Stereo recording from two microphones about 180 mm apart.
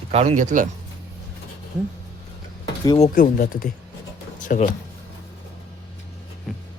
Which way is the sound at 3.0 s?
45° left (ahead or behind).